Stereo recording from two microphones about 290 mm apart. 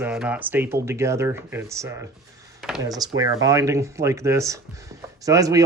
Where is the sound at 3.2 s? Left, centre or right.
Centre.